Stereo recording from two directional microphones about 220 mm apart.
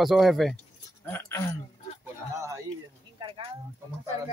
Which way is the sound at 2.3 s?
15° right (ahead or behind).